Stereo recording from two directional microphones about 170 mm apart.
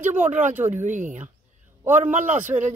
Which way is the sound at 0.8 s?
45° right (ahead or behind).